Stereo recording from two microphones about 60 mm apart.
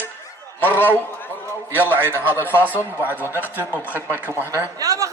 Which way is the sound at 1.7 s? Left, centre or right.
Right.